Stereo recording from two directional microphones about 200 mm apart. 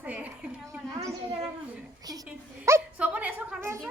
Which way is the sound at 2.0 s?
20° right (ahead or behind).